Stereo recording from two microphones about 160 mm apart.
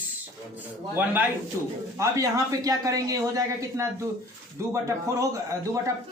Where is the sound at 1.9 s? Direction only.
20° right (ahead or behind).